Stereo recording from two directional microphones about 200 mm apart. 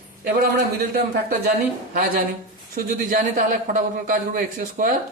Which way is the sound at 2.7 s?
45° right (ahead or behind).